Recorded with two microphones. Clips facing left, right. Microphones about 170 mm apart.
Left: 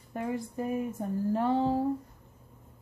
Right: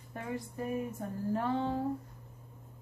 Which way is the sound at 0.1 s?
25° left (ahead or behind).